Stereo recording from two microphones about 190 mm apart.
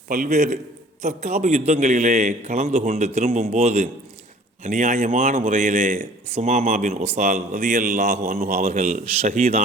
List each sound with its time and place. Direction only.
0.1 s speech: 40° right (ahead or behind)